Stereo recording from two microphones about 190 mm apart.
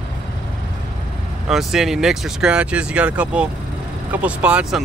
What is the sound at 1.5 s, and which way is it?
Speech, centre (ahead or behind).